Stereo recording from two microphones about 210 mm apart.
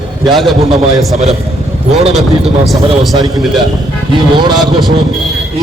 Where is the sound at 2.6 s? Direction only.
Centre (ahead or behind).